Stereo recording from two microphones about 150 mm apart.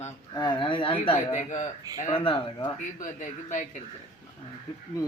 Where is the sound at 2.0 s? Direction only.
40° left (ahead or behind).